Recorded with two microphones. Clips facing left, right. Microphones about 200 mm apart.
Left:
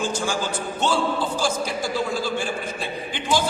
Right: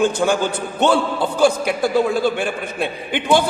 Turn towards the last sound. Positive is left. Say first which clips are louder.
# right 6 dB
turn(degrees=-60)  # may be behind; listen again after turning